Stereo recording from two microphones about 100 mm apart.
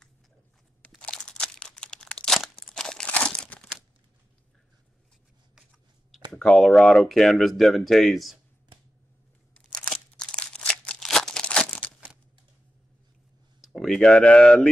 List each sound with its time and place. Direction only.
0.9 s crunch: 10° left (ahead or behind)
5.6 s shuffling cards: centre (ahead or behind)
6.3 s speech: 5° left (ahead or behind)
9.6 s crumpling: 5° left (ahead or behind)
13.7 s speech: 5° left (ahead or behind)